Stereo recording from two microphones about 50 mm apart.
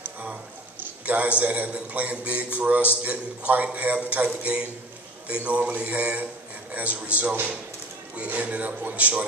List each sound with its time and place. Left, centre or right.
1.0 s a man's voice: right